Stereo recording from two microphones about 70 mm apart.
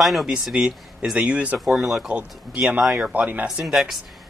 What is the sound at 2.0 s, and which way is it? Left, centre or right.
Speech, centre.